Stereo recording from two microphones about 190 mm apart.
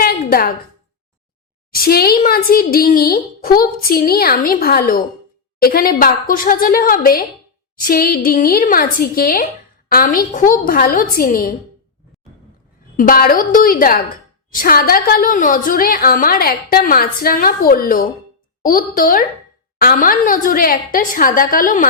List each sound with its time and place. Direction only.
0.0 s a sound: 50° left (ahead or behind)
1.7 s a woman's voice: 55° left (ahead or behind)
13.0 s a woman's voice: 50° left (ahead or behind)